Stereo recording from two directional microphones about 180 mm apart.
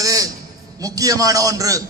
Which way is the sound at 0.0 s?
20° right (ahead or behind).